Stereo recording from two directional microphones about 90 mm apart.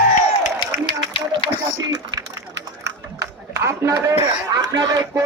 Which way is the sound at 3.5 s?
30° right (ahead or behind).